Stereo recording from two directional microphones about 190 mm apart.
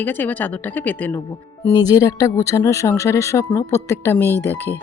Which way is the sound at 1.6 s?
20° left (ahead or behind).